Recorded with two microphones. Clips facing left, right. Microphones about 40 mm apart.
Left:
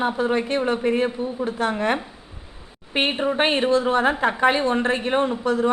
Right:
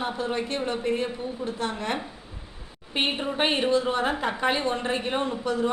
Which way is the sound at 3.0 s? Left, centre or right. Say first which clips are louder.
Left 5 dB; left.